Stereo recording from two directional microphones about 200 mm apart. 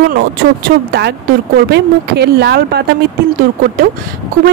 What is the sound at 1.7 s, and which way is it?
Speech, 55° right (ahead or behind).